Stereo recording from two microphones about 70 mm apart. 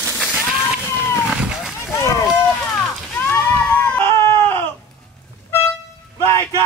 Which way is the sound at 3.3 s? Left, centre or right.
Left.